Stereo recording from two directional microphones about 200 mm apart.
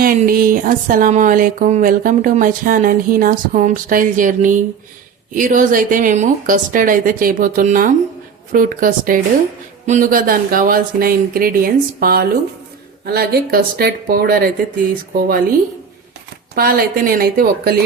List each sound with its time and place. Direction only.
0.0 s speech: 45° right (ahead or behind)
16.6 s speech: 45° right (ahead or behind)